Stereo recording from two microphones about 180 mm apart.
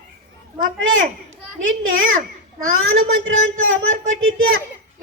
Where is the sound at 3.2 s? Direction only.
90° right.